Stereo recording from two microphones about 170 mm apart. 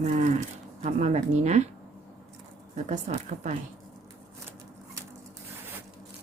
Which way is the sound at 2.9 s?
45° right (ahead or behind).